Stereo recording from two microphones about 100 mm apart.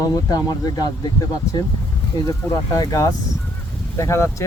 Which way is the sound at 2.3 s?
40° left (ahead or behind).